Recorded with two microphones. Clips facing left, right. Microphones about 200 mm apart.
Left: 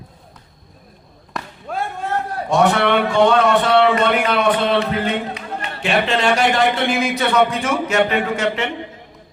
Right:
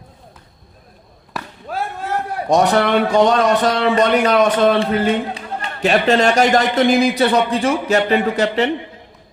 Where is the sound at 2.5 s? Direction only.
40° right (ahead or behind).